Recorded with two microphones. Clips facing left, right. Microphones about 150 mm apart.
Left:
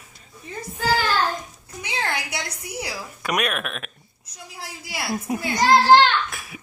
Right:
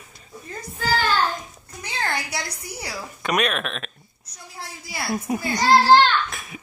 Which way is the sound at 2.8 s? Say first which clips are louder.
Left 2 dB; 5° left (ahead or behind).